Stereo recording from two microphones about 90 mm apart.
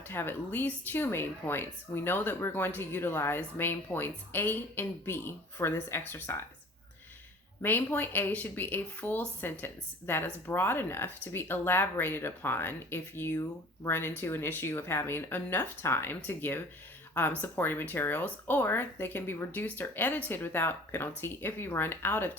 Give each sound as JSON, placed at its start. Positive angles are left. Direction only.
{"t": 0.1, "sound": "a woman's voice", "side_deg": 25}
{"t": 7.6, "sound": "a woman's voice", "side_deg": 20}